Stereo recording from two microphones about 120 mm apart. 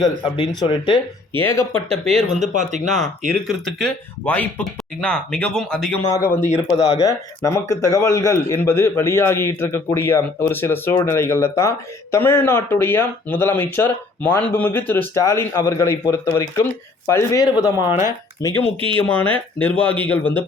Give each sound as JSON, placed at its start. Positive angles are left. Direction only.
{"t": 0.6, "sound": "speech", "side_deg": 40}
{"t": 1.4, "sound": "speech", "side_deg": 20}
{"t": 2.0, "sound": "speech", "side_deg": -70}
{"t": 3.4, "sound": "speech", "side_deg": 5}
{"t": 4.3, "sound": "speech", "side_deg": 15}
{"t": 6.1, "sound": "speech", "side_deg": 25}
{"t": 18.8, "sound": "speech", "side_deg": -50}
{"t": 19.0, "sound": "speech", "side_deg": 10}